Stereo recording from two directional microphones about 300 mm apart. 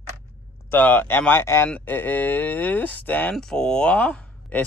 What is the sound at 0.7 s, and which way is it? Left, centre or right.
Speech, centre.